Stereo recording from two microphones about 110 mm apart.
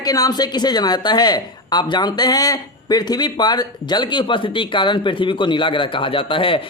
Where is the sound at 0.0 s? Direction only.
35° left (ahead or behind).